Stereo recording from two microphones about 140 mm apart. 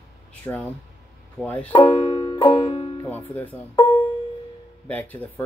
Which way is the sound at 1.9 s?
45° left (ahead or behind).